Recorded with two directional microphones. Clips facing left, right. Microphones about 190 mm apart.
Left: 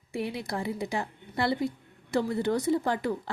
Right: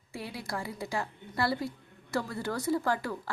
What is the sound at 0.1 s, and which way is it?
A woman's voice, 20° left (ahead or behind).